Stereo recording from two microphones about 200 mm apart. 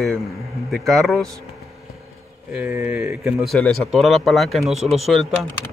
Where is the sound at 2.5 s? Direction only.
10° right (ahead or behind).